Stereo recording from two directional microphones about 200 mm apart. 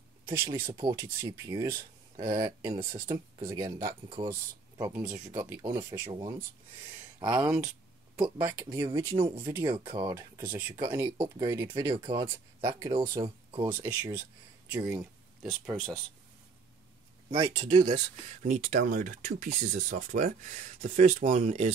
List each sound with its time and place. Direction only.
0.7 s speech: 20° right (ahead or behind)
7.4 s speech: 5° right (ahead or behind)
8.6 s speech: 20° right (ahead or behind)
13.7 s speech: 10° right (ahead or behind)
17.3 s speech: 25° right (ahead or behind)
17.9 s speech: 40° right (ahead or behind)